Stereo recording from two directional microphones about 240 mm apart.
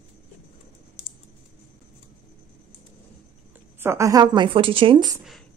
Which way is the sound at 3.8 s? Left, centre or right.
Centre.